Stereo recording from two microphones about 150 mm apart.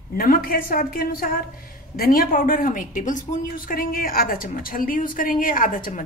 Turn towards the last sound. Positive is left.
turn(degrees=65)  # may be behind; listen again after turning